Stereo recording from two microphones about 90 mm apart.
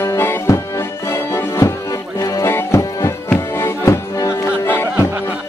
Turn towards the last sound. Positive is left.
turn(degrees=25)  # may be behind; listen again after turning